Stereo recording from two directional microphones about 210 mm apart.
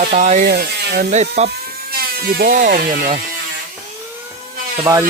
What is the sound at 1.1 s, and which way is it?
Speech, 35° right (ahead or behind).